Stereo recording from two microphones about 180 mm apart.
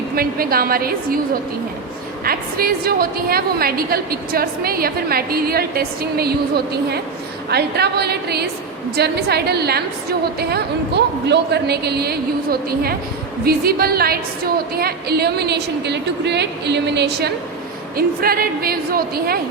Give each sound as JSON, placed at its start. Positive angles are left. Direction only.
{"t": 0.2, "sound": "a woman's voice", "side_deg": -55}
{"t": 2.2, "sound": "a woman's voice", "side_deg": -55}
{"t": 7.5, "sound": "a woman's voice", "side_deg": -65}
{"t": 17.9, "sound": "a woman's voice", "side_deg": -55}